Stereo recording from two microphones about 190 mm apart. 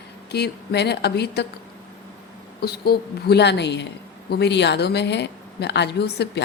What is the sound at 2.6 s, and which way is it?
A woman's voice, 55° left (ahead or behind).